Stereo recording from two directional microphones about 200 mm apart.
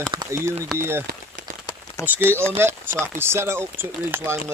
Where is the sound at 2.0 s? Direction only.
10° right (ahead or behind).